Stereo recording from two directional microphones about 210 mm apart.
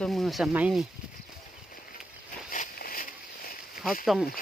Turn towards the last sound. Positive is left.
turn(degrees=0)  # may be behind; listen again after turning